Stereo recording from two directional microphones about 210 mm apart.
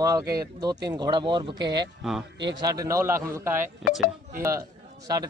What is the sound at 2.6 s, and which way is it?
A man's voice, 15° right (ahead or behind).